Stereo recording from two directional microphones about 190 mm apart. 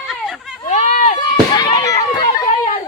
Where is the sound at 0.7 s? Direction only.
40° left (ahead or behind).